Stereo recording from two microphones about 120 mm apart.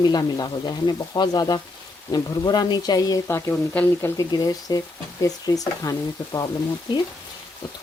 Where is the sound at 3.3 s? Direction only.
20° left (ahead or behind).